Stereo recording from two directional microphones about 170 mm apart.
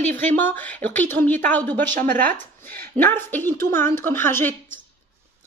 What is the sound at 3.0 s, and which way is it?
Speech, 10° left (ahead or behind).